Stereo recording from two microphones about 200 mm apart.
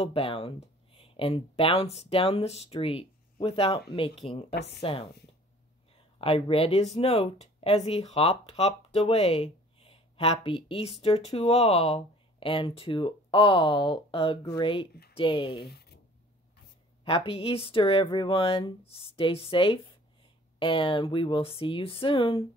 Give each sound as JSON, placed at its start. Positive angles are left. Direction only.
{"t": 0.0, "sound": "speech", "side_deg": 30}
{"t": 4.6, "sound": "a woman's voice", "side_deg": 55}
{"t": 6.2, "sound": "speech", "side_deg": 30}
{"t": 15.6, "sound": "writing", "side_deg": 55}
{"t": 17.0, "sound": "speech", "side_deg": 25}